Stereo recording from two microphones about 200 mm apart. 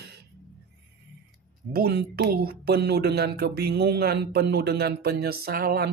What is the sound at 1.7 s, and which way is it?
Speech, 50° right (ahead or behind).